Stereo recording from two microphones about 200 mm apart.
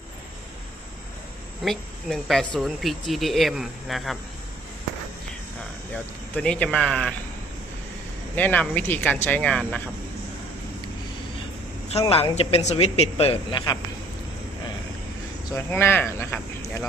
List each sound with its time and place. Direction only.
1.6 s speech: centre (ahead or behind)
5.9 s speech: 5° left (ahead or behind)
8.4 s speech: 10° left (ahead or behind)
11.9 s speech: 30° left (ahead or behind)
15.5 s speech: 10° left (ahead or behind)